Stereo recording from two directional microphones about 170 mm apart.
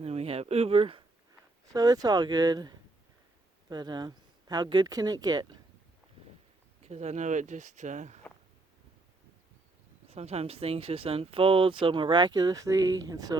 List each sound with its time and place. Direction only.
0.0 s speech: 35° right (ahead or behind)
1.7 s speech: 20° right (ahead or behind)
6.8 s speech: 40° right (ahead or behind)
10.1 s speech: 40° right (ahead or behind); by 13.3 s 20° right (ahead or behind)